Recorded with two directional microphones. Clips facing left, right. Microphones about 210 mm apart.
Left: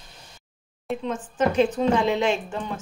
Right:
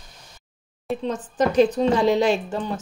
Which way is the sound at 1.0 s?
35° right (ahead or behind).